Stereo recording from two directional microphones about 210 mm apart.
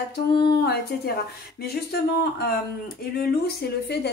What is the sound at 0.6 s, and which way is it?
Speech, 50° left (ahead or behind).